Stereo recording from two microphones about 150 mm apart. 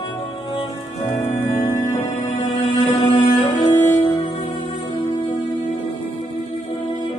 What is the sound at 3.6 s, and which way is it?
Music, 25° left (ahead or behind).